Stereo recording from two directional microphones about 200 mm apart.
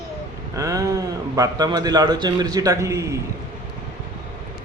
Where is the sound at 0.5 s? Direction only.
15° right (ahead or behind).